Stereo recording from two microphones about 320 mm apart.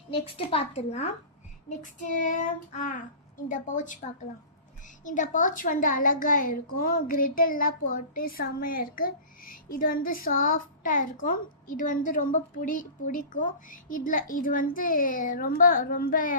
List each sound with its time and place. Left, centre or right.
0.3 s a child's voice: centre